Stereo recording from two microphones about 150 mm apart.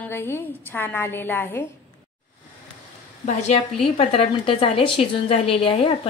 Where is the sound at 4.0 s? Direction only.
40° left (ahead or behind).